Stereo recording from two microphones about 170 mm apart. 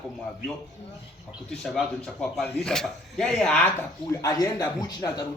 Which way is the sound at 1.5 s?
Centre (ahead or behind).